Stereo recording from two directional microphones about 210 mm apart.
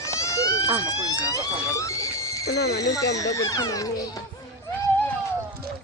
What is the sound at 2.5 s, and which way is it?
Speech, 50° left (ahead or behind).